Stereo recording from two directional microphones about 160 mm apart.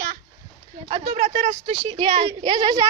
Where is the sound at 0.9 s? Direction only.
45° right (ahead or behind); by 2.8 s 25° right (ahead or behind).